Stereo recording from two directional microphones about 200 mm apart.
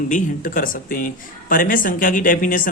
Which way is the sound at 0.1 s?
45° left (ahead or behind).